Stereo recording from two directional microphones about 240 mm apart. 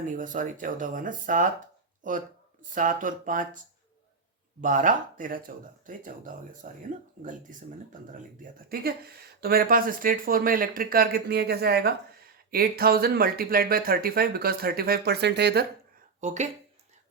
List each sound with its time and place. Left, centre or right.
0.0 s speech: right
4.6 s speech: right
8.7 s speech: right
16.2 s speech: right